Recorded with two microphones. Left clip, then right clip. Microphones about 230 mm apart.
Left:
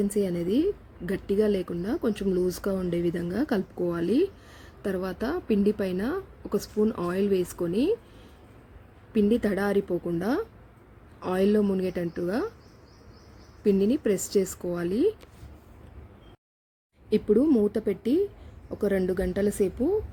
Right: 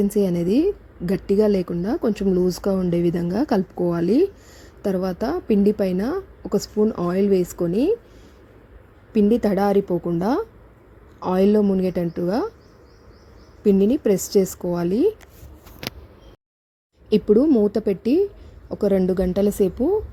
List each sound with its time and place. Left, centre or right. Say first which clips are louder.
0.0 s a woman's voice: right 6 dB; centre
9.1 s a woman's voice: right 6 dB; centre
13.7 s a woman's voice: right 6 dB; centre
17.1 s a woman's voice: right 6 dB; centre